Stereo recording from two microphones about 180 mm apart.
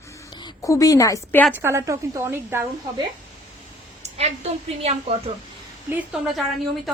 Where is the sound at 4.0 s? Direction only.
35° right (ahead or behind).